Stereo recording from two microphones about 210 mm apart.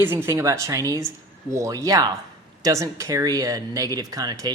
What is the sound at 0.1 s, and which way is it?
Speech, 10° right (ahead or behind).